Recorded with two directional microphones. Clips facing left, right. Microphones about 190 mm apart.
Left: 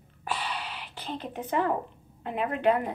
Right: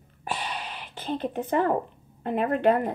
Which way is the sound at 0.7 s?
50° right (ahead or behind).